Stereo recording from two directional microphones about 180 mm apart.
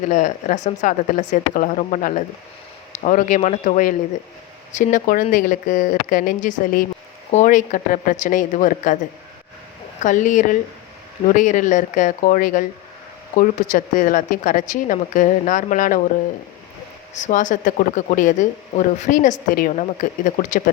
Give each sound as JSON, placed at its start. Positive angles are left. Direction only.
{"t": 0.1, "sound": "speech", "side_deg": 45}
{"t": 10.0, "sound": "speech", "side_deg": 45}
{"t": 17.2, "sound": "speech", "side_deg": 45}